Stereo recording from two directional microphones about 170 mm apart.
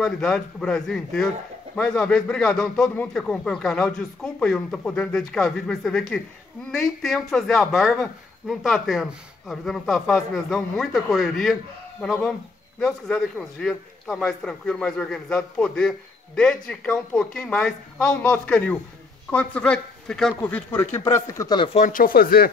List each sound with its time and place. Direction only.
0.0 s a man's voice: 5° left (ahead or behind); by 21.6 s 20° left (ahead or behind)
21.7 s speech: 50° left (ahead or behind)